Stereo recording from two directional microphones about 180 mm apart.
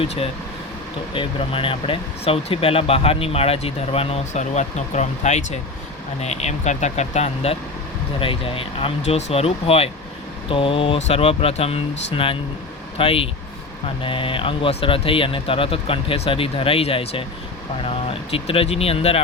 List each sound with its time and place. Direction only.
1.1 s speech: 30° left (ahead or behind)